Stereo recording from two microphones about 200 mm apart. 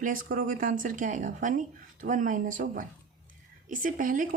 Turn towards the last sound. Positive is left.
turn(degrees=-40)  # may be behind; listen again after turning